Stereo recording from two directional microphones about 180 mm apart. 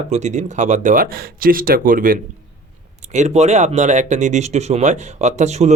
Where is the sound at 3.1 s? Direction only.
40° right (ahead or behind).